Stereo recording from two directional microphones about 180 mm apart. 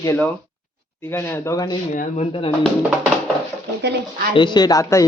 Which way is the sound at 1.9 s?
40° left (ahead or behind).